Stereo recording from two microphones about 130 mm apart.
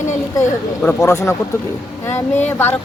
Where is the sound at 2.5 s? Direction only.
15° left (ahead or behind).